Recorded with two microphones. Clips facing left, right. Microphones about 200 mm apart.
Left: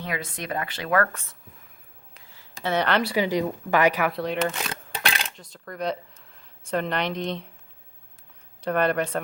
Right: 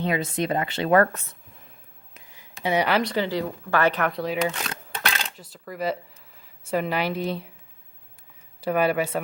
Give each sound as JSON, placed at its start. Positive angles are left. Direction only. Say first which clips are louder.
{"t": 0.0, "sound": "speech", "louder": "right 7 dB", "side_deg": -25}
{"t": 2.1, "sound": "a sound", "louder": "right 3 dB", "side_deg": -15}
{"t": 2.6, "sound": "speech", "louder": "right 1 dB", "side_deg": -10}
{"t": 3.0, "sound": "speech", "louder": "left 1 dB", "side_deg": 10}
{"t": 8.6, "sound": "speech", "louder": "right 1 dB", "side_deg": -5}